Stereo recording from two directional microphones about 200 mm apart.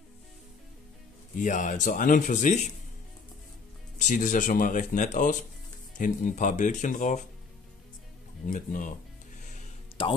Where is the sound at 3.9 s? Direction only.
40° left (ahead or behind).